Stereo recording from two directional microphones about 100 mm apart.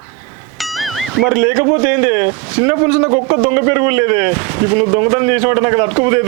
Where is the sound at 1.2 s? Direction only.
20° right (ahead or behind).